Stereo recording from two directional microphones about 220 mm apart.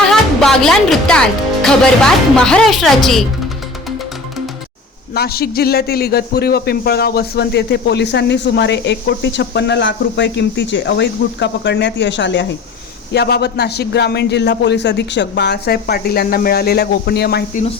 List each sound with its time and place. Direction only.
0.1 s music: centre (ahead or behind)
2.3 s speech: 5° left (ahead or behind)
5.1 s a man's voice: 45° left (ahead or behind)